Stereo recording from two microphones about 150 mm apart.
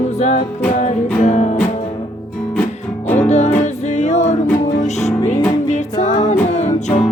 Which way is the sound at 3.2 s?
50° left (ahead or behind).